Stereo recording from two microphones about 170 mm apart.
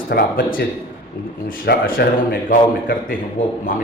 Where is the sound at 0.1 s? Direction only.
65° left (ahead or behind).